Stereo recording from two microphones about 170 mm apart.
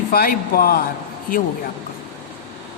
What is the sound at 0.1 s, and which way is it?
A man's voice, 60° left (ahead or behind).